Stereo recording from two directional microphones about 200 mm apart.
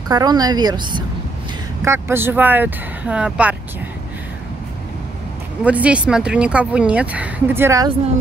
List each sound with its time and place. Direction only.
0.1 s a woman's voice: 20° right (ahead or behind)
5.6 s speech: 5° right (ahead or behind)